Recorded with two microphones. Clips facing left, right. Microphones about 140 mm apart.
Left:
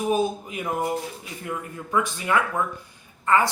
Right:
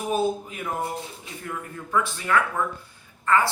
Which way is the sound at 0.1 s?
15° left (ahead or behind).